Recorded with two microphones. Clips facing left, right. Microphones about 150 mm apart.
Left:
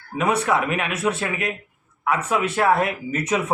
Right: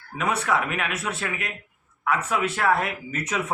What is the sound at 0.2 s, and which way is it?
Speech, 15° left (ahead or behind).